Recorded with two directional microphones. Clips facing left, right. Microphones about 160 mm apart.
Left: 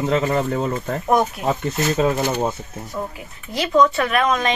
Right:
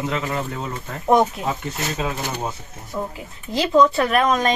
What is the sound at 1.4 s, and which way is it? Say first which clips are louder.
Speech: left 4 dB; 25° right (ahead or behind).